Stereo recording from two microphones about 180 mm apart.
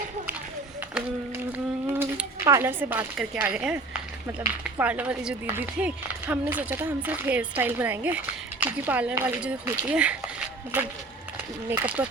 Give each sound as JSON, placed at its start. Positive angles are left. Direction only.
{"t": 1.5, "sound": "a sound", "side_deg": -10}
{"t": 3.2, "sound": "speech", "side_deg": -5}
{"t": 11.7, "sound": "speech", "side_deg": -10}